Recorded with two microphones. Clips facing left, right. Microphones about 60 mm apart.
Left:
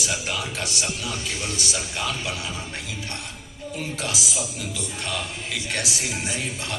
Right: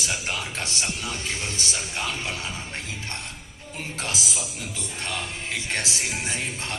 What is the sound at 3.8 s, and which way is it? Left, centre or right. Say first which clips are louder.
Speech: left 1 dB; right.